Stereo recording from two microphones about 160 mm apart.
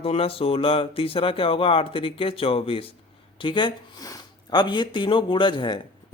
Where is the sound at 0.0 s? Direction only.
35° left (ahead or behind).